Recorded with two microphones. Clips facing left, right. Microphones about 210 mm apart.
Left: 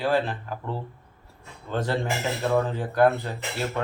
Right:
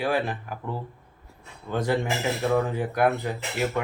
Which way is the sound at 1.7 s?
10° right (ahead or behind).